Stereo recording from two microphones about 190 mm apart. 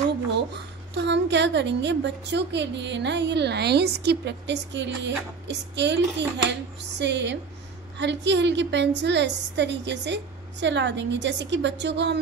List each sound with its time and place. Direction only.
0.9 s a woman's voice: 65° right (ahead or behind)